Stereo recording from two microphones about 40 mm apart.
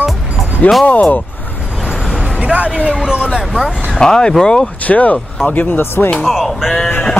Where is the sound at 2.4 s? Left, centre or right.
Right.